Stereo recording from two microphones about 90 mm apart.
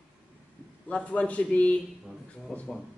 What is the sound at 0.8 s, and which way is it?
Speech, 15° left (ahead or behind).